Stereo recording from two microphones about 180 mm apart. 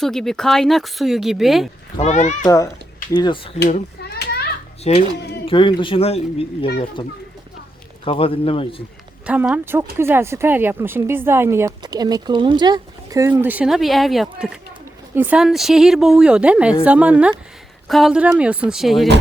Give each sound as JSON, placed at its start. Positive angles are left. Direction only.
{"t": 0.0, "sound": "speech", "side_deg": 0}
{"t": 2.0, "sound": "speech", "side_deg": 40}
{"t": 3.1, "sound": "speech", "side_deg": 25}
{"t": 4.0, "sound": "children playing", "side_deg": 60}
{"t": 4.8, "sound": "speech", "side_deg": 35}
{"t": 8.0, "sound": "speech", "side_deg": 30}
{"t": 9.2, "sound": "speech", "side_deg": -5}